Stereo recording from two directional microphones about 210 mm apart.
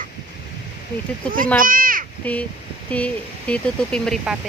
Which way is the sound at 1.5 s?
40° right (ahead or behind).